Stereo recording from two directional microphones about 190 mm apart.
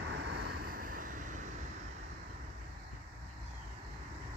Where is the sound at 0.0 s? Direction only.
65° right (ahead or behind); by 1.5 s 40° right (ahead or behind).